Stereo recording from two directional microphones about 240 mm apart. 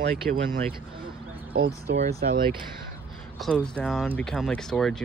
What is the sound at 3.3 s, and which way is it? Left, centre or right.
Speech, centre.